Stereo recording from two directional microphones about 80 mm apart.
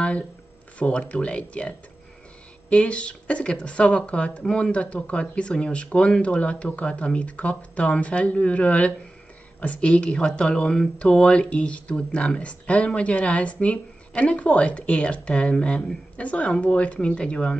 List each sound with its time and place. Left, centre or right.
0.7 s speech: centre
2.7 s speech: centre